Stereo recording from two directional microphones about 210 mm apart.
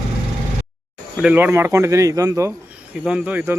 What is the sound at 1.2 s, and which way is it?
Speech, 10° right (ahead or behind).